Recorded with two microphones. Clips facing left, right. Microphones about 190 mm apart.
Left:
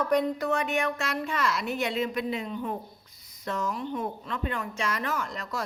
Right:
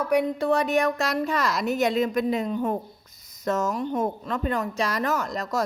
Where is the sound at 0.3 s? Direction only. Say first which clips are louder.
Right 5 dB; 35° right (ahead or behind).